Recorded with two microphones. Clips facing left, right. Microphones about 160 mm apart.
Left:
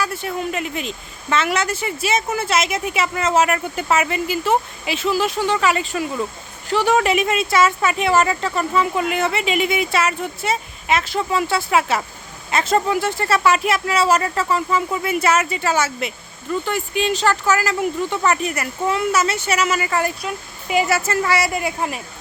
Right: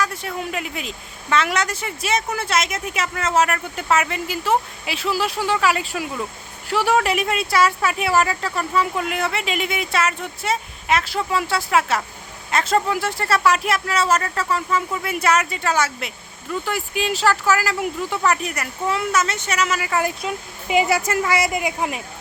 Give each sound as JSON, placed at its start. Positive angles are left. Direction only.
{"t": 0.0, "sound": "speech", "side_deg": 5}
{"t": 20.1, "sound": "speech", "side_deg": -20}